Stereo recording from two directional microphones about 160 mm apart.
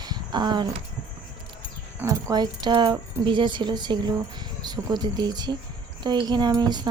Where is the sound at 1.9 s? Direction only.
20° right (ahead or behind).